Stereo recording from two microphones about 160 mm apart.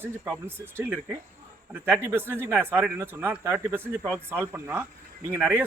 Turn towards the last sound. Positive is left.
turn(degrees=-15)  # may be behind; listen again after turning